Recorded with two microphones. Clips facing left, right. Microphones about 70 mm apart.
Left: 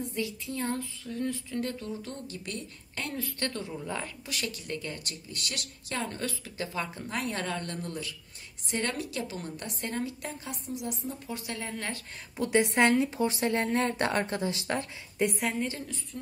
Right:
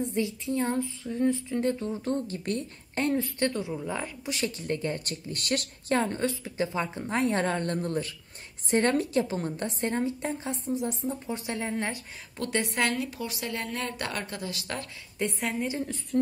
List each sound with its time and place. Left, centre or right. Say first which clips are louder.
0.0 s speech: right 5 dB; right
12.4 s a woman's voice: left 4 dB; centre
15.2 s a woman's voice: left 1 dB; centre